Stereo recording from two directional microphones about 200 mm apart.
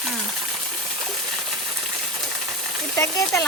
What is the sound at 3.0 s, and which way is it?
Speech, 15° left (ahead or behind).